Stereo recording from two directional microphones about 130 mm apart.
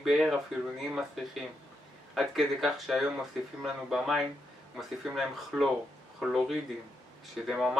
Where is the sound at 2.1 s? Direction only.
Centre (ahead or behind).